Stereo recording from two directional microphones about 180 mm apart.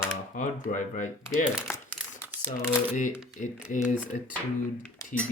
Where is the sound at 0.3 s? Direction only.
45° left (ahead or behind).